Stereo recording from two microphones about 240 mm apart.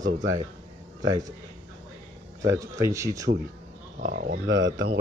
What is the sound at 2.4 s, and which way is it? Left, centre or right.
Speech, centre.